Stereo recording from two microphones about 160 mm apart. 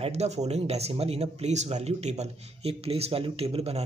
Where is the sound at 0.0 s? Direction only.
45° right (ahead or behind).